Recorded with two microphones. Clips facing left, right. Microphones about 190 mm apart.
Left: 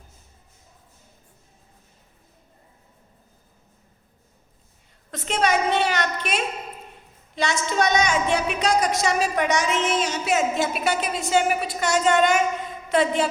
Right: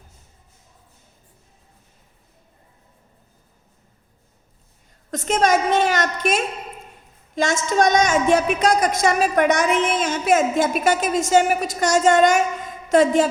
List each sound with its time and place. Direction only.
5.1 s a woman's voice: 45° right (ahead or behind)